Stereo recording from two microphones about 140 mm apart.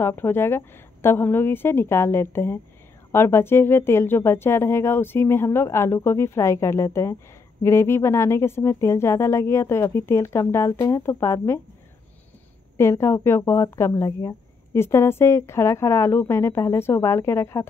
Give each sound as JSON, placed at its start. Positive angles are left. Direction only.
{"t": 0.0, "sound": "speech", "side_deg": 15}
{"t": 12.7, "sound": "speech", "side_deg": 20}